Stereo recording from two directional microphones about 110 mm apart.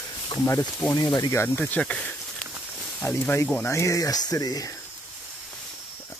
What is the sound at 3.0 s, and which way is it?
Speech, 25° left (ahead or behind).